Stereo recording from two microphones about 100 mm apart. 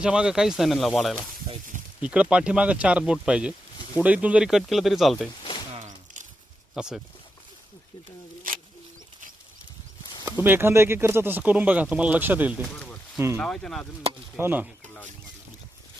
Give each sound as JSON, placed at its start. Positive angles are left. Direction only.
{"t": 0.0, "sound": "speech", "side_deg": -10}
{"t": 2.0, "sound": "speech", "side_deg": -10}
{"t": 5.4, "sound": "a sound", "side_deg": 55}
{"t": 6.7, "sound": "speech", "side_deg": -5}
{"t": 10.4, "sound": "speech", "side_deg": -20}
{"t": 13.4, "sound": "speech", "side_deg": 5}
{"t": 14.3, "sound": "speech", "side_deg": -20}